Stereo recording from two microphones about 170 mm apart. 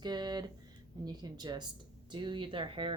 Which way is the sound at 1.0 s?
25° right (ahead or behind).